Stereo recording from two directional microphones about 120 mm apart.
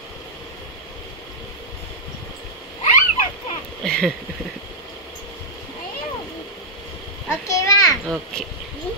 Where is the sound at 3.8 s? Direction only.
5° left (ahead or behind).